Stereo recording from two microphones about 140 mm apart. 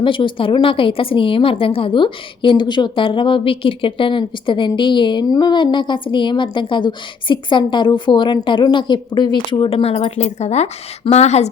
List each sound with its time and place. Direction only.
0.0 s a woman's voice: 35° left (ahead or behind); by 11.4 s 50° left (ahead or behind)